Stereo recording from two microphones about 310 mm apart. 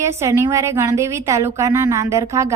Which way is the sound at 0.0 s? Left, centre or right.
Centre.